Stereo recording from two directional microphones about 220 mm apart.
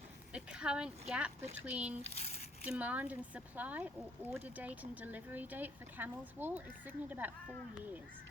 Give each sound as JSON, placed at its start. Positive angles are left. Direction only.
{"t": 0.3, "sound": "speech", "side_deg": -5}
{"t": 2.1, "sound": "speech", "side_deg": 30}
{"t": 2.6, "sound": "speech", "side_deg": -5}